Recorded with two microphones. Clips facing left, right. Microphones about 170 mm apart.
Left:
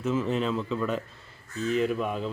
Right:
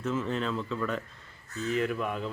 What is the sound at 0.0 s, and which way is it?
Speech, 10° left (ahead or behind).